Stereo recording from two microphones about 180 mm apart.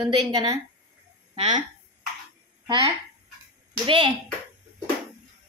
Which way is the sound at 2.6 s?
25° right (ahead or behind).